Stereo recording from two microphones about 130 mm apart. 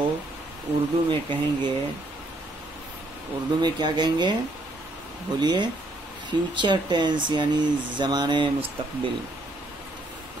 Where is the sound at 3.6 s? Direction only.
35° right (ahead or behind).